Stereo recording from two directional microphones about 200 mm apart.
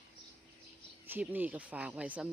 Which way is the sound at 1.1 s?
10° right (ahead or behind).